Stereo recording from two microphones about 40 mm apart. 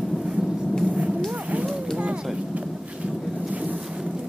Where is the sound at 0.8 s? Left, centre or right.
Right.